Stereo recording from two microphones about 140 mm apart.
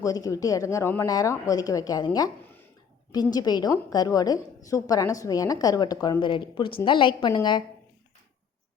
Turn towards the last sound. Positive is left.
turn(degrees=30)  # may be behind; listen again after turning